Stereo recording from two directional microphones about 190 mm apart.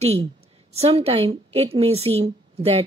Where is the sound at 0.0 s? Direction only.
35° right (ahead or behind).